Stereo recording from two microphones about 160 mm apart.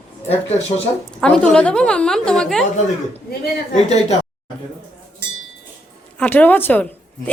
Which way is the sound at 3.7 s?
45° left (ahead or behind).